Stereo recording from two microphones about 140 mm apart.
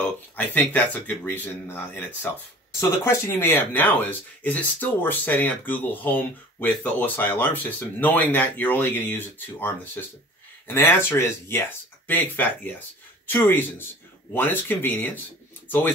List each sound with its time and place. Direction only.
0.4 s speech: 10° left (ahead or behind)